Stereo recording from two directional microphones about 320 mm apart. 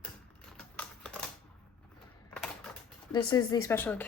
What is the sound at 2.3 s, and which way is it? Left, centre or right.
Typing, centre.